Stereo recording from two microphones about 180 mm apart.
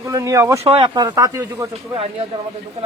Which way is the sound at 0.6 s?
30° right (ahead or behind).